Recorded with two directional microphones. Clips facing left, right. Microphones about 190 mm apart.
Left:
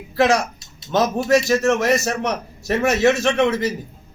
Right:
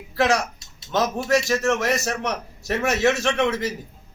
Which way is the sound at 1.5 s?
35° left (ahead or behind).